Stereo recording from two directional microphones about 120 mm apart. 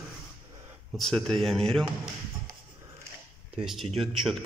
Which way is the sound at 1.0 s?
5° left (ahead or behind).